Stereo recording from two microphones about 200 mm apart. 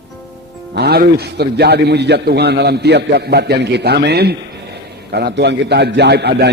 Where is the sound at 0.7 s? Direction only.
55° right (ahead or behind).